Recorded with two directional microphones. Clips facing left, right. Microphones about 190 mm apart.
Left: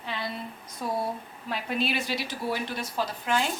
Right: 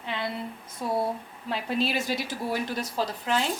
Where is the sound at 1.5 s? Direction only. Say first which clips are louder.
Right 2 dB; 35° right (ahead or behind).